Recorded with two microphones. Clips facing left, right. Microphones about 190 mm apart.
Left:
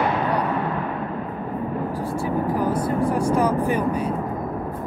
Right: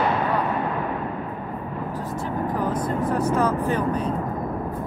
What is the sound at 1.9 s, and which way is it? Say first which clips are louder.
Vehicle: left 2 dB; 10° left (ahead or behind).